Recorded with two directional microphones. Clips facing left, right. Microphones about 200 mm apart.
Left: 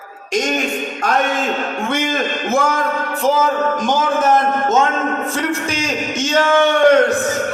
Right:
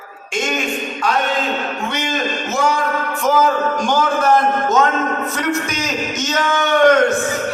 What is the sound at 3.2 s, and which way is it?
A man's voice, 25° left (ahead or behind).